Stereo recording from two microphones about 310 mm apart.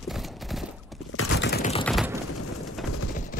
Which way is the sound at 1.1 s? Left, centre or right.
Left.